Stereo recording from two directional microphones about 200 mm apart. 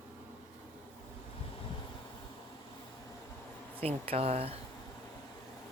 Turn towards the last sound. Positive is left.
turn(degrees=-30)  # may be behind; listen again after turning